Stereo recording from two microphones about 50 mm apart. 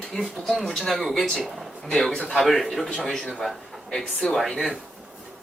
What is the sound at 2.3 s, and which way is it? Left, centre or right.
Speech, centre.